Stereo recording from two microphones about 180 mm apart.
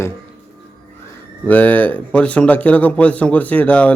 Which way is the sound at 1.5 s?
10° left (ahead or behind).